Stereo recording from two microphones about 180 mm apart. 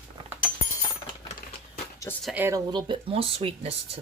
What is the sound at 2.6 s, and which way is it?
Speech, 25° right (ahead or behind).